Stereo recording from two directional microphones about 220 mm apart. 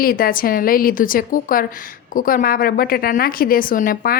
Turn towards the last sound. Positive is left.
turn(degrees=40)  # may be behind; listen again after turning